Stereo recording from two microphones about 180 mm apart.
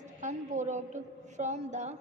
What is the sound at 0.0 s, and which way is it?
A woman's voice, 40° right (ahead or behind).